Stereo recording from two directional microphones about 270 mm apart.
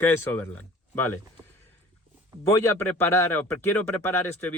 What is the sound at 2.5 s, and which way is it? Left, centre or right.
Speech, centre.